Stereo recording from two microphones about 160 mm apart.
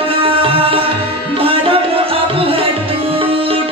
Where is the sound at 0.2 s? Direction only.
35° right (ahead or behind).